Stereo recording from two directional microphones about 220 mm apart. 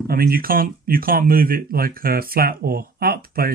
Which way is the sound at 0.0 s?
40° right (ahead or behind).